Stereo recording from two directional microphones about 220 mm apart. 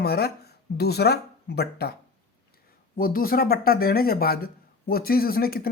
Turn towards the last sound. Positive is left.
turn(degrees=45)  # may be behind; listen again after turning